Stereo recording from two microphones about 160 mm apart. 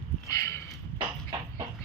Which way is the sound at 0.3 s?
20° left (ahead or behind).